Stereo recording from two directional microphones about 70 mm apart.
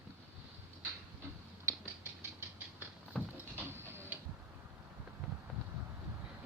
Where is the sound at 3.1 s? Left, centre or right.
Centre.